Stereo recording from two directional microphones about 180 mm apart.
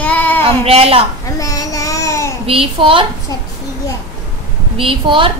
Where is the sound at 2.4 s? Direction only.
30° right (ahead or behind).